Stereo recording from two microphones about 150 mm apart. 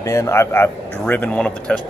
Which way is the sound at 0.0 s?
20° left (ahead or behind).